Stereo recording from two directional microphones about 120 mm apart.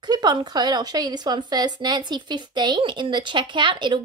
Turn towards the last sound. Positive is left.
turn(degrees=-40)  # may be behind; listen again after turning